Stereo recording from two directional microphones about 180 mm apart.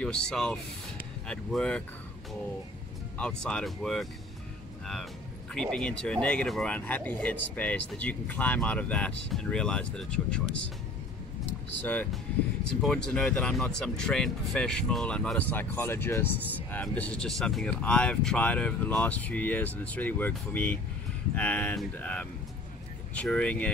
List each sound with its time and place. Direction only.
0.0 s speech: 5° left (ahead or behind)
3.2 s speech: 5° left (ahead or behind)
5.5 s speech: 5° left (ahead or behind)
11.8 s speech: 10° left (ahead or behind)